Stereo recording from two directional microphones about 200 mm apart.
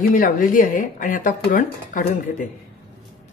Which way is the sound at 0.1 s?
45° left (ahead or behind).